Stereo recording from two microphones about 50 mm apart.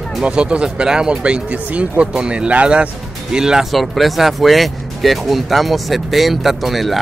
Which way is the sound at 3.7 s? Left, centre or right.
Centre.